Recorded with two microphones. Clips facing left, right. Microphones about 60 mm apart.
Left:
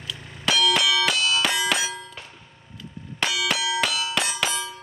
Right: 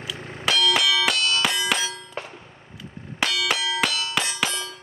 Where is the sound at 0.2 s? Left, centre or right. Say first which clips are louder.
Right 6 dB; right.